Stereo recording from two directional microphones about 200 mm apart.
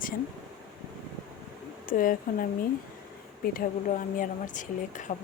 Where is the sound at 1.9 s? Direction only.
45° left (ahead or behind).